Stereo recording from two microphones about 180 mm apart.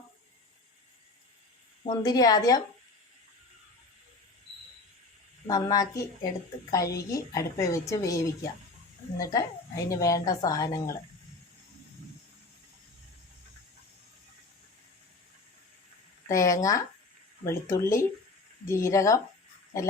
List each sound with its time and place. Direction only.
1.9 s a woman's voice: 20° left (ahead or behind)
5.5 s a woman's voice: 20° left (ahead or behind)
16.3 s a woman's voice: 15° left (ahead or behind)